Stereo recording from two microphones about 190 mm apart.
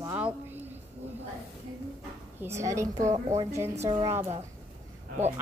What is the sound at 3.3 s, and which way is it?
Speech, 15° right (ahead or behind).